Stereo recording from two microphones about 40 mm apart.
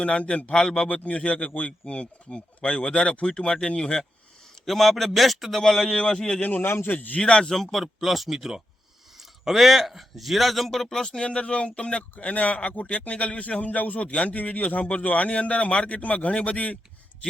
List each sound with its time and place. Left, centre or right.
0.0 s speech: left
0.6 s a man's voice: centre
1.0 s a man's voice: left
4.6 s a man's voice: centre
6.6 s a man's voice: left
6.8 s a man's voice: left
7.2 s speech: left
7.4 s a man's voice: centre
11.3 s speech: left
12.2 s a man's voice: left